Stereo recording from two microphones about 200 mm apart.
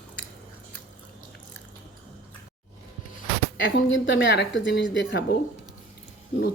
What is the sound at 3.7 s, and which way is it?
Speech, 65° left (ahead or behind).